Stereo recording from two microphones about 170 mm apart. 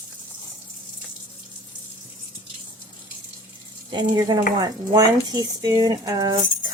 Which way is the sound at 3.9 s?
25° right (ahead or behind).